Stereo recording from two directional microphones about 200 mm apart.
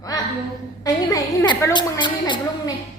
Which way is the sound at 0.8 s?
15° left (ahead or behind).